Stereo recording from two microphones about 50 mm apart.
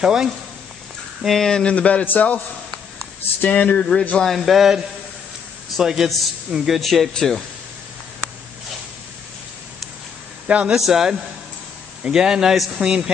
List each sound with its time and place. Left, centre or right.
0.0 s a man's voice: centre
1.2 s speech: centre
1.7 s a man's voice: left
4.2 s a man's voice: centre
10.5 s speech: right
10.9 s a man's voice: centre